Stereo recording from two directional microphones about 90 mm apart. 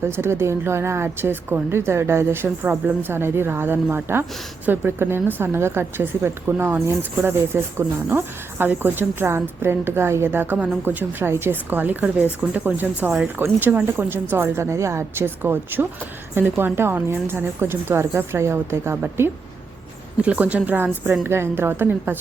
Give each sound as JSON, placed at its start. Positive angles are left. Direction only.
{"t": 0.0, "sound": "a woman's voice", "side_deg": -30}
{"t": 20.2, "sound": "a woman's voice", "side_deg": -15}